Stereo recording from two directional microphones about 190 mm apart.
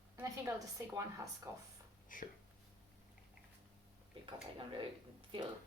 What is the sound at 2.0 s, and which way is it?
Speech, 45° left (ahead or behind).